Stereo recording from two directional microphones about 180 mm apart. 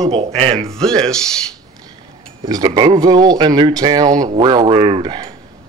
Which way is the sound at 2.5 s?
20° right (ahead or behind).